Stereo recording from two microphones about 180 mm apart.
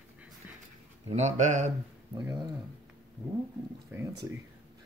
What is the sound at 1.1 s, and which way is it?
Speech, 40° right (ahead or behind).